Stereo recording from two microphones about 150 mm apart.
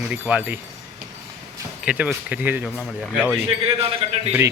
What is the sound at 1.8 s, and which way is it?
Speech, 5° right (ahead or behind).